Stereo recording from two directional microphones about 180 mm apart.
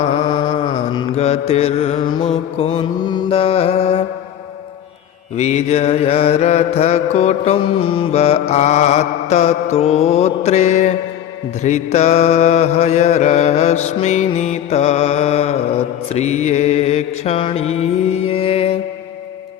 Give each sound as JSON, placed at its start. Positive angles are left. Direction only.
{"t": 0.0, "sound": "mantra", "side_deg": 30}
{"t": 5.4, "sound": "mantra", "side_deg": 40}